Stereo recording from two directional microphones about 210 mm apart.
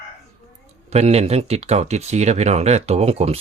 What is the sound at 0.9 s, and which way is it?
Speech, 30° right (ahead or behind).